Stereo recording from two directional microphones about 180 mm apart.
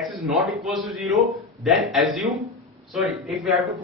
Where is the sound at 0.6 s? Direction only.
Centre (ahead or behind).